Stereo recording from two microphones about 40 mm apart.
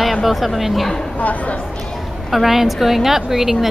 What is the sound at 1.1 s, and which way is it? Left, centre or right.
Speech, left.